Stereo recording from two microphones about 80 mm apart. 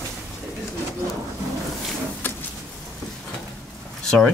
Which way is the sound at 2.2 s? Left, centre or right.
Left.